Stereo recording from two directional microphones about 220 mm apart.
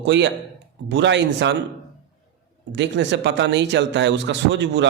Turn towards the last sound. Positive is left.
turn(degrees=-55)  # may be behind; listen again after turning